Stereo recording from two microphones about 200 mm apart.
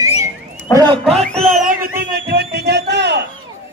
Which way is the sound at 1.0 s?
Centre (ahead or behind).